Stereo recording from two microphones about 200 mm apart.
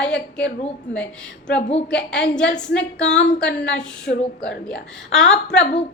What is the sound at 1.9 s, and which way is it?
Speech, 5° left (ahead or behind).